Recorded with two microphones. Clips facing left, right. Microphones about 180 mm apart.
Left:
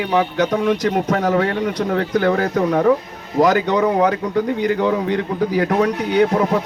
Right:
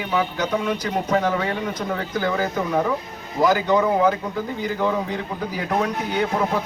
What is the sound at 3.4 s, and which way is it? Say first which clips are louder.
Speech: left 4 dB; 75° left (ahead or behind).